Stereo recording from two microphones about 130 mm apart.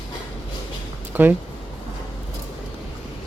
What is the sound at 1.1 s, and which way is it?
Speech, 15° right (ahead or behind).